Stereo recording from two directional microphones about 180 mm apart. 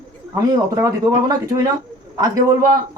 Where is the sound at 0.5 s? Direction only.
20° right (ahead or behind).